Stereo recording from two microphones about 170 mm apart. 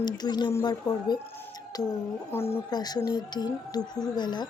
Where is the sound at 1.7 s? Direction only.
20° left (ahead or behind).